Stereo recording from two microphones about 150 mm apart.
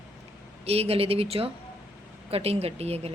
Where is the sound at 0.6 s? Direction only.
40° right (ahead or behind).